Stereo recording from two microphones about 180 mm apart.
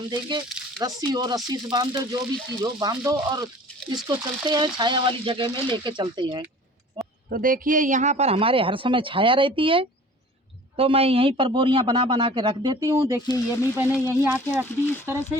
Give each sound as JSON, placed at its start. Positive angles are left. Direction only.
{"t": 0.1, "sound": "a man's voice", "side_deg": -25}
{"t": 0.4, "sound": "a sound", "side_deg": -5}
{"t": 0.8, "sound": "a man's voice", "side_deg": -20}
{"t": 7.3, "sound": "a man's voice", "side_deg": -50}
{"t": 13.2, "sound": "speech", "side_deg": 20}
{"t": 13.7, "sound": "speech", "side_deg": -15}